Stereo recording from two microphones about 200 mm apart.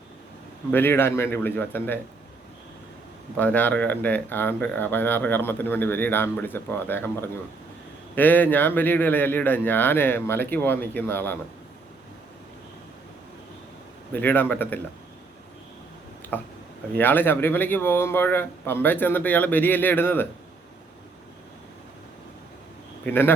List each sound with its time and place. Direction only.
0.7 s speech: 10° left (ahead or behind)
3.3 s speech: 10° left (ahead or behind)
14.1 s speech: 10° left (ahead or behind)
16.9 s speech: 10° left (ahead or behind)
23.0 s speech: 10° left (ahead or behind)